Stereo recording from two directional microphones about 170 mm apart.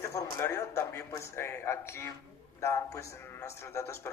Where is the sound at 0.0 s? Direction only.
15° left (ahead or behind).